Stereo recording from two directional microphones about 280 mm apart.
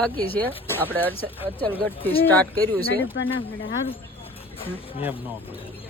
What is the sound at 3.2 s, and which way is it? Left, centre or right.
Speech, left.